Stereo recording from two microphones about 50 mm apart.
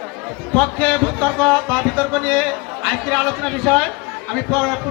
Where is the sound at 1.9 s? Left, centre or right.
Centre.